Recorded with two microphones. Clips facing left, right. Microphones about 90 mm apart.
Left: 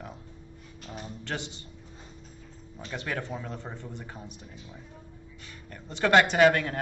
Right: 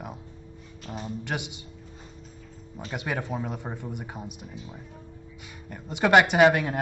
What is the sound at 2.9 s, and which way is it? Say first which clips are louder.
Speech: right 3 dB; 15° right (ahead or behind).